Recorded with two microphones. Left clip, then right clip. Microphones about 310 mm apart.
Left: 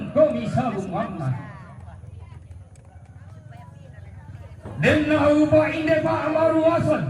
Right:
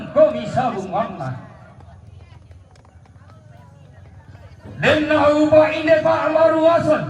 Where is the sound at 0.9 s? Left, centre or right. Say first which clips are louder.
Right 7 dB; right.